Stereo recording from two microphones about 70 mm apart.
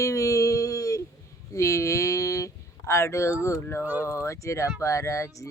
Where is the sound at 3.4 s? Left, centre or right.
Left.